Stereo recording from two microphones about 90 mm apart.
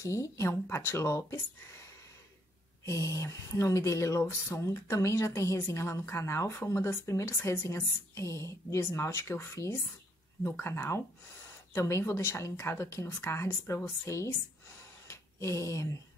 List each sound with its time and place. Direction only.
0.0 s a woman's voice: 35° left (ahead or behind)
2.8 s a woman's voice: 35° left (ahead or behind)